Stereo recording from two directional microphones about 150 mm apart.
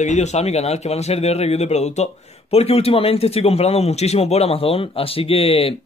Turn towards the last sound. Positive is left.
turn(degrees=40)  # may be behind; listen again after turning